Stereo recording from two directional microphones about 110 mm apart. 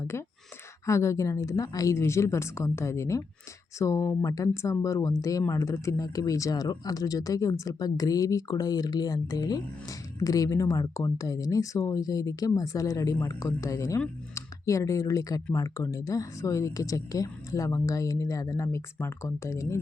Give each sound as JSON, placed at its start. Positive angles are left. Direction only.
{"t": 0.0, "sound": "speech", "side_deg": 25}